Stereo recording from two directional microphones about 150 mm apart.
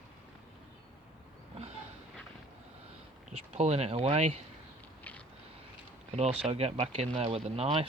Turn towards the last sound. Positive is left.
turn(degrees=-45)  # may be behind; listen again after turning